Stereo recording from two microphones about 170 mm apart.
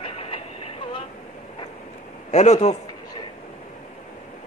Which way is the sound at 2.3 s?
40° left (ahead or behind).